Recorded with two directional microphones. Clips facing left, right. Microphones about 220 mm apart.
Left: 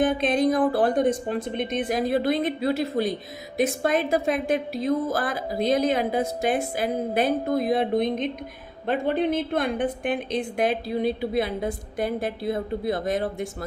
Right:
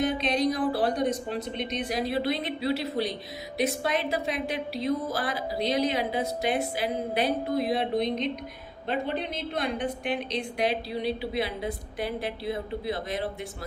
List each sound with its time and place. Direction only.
0.0 s a woman's voice: 50° left (ahead or behind)